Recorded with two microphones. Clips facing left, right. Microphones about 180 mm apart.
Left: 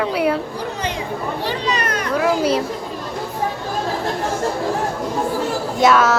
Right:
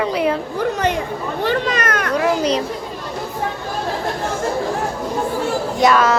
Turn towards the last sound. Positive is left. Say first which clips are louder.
# even
turn(degrees=0)  # may be behind; listen again after turning